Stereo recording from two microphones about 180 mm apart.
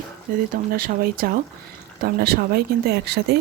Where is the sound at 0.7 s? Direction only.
55° right (ahead or behind).